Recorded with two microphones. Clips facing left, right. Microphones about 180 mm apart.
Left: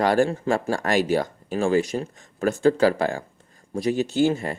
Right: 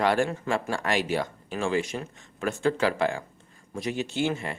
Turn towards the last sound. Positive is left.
turn(degrees=40)  # may be behind; listen again after turning